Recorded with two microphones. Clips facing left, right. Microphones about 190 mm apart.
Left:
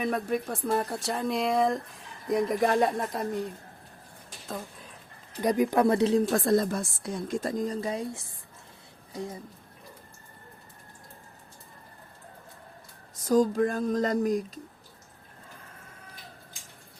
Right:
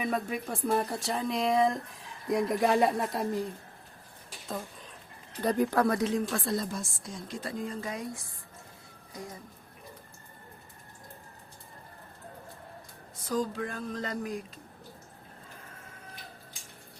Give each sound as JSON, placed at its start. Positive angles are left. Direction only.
{"t": 0.0, "sound": "speech", "side_deg": 0}
{"t": 4.4, "sound": "a sound", "side_deg": 0}
{"t": 5.4, "sound": "speech", "side_deg": 15}
{"t": 6.4, "sound": "a woman's voice", "side_deg": 50}
{"t": 13.1, "sound": "a woman's voice", "side_deg": 45}